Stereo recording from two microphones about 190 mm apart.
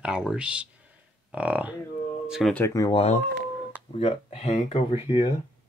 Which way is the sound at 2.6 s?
20° left (ahead or behind).